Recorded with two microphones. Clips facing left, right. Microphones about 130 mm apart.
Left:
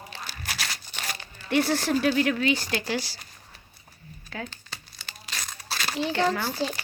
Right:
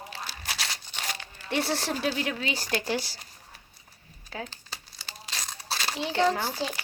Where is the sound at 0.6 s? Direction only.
20° right (ahead or behind).